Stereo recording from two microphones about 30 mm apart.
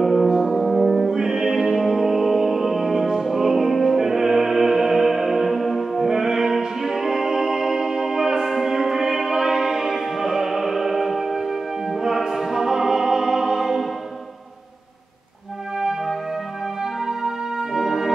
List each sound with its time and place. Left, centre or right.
0.0 s music: centre
0.8 s music: centre
6.0 s music: centre
15.8 s music: centre